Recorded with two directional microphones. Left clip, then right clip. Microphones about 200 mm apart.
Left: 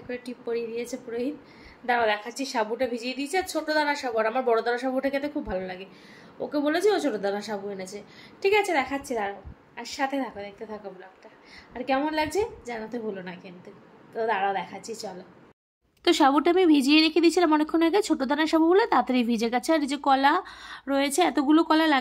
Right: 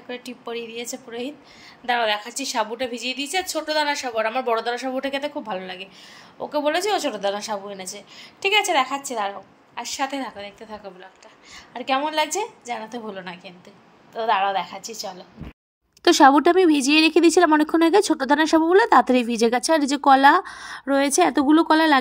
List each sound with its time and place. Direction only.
0.1 s a woman's voice: centre (ahead or behind)
16.0 s speech: 25° right (ahead or behind)